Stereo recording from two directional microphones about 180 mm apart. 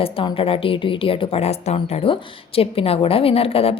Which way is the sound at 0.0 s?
30° left (ahead or behind).